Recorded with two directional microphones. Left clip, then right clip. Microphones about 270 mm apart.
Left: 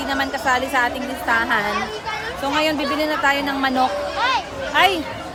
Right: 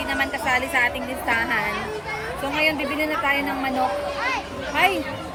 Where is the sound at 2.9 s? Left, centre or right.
Left.